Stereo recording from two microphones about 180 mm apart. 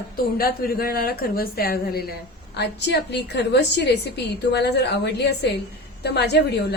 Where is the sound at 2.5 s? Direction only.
70° left (ahead or behind).